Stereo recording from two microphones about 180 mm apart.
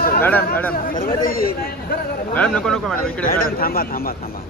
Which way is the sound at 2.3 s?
5° left (ahead or behind).